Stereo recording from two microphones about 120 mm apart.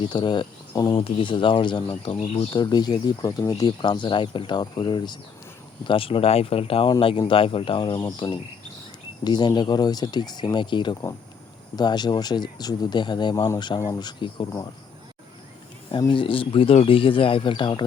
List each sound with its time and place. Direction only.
0.0 s speech: 40° left (ahead or behind)
0.9 s a man's voice: 45° left (ahead or behind)
5.9 s a man's voice: 50° left (ahead or behind)
13.7 s speech: 25° left (ahead or behind)
15.9 s a man's voice: 40° left (ahead or behind)